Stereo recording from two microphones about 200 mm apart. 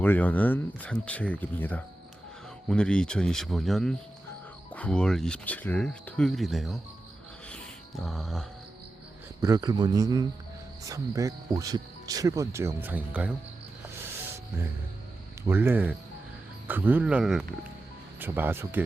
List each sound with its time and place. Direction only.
0.0 s speech: 10° left (ahead or behind)
7.4 s music: 5° left (ahead or behind)
9.4 s speech: 20° right (ahead or behind)
15.4 s speech: 10° right (ahead or behind)